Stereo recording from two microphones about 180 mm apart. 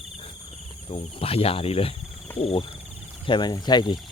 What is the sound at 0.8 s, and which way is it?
Speech, 30° left (ahead or behind).